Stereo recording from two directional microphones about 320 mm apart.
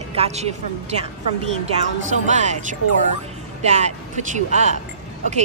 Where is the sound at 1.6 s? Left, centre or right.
Right.